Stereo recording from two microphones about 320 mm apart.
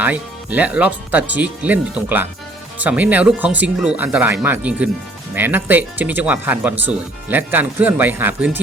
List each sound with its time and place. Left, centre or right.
0.0 s speech: centre